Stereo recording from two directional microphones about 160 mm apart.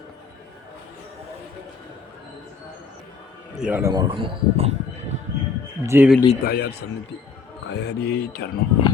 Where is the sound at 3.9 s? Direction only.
25° right (ahead or behind).